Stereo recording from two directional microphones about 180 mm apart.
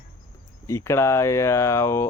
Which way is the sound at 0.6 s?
15° left (ahead or behind).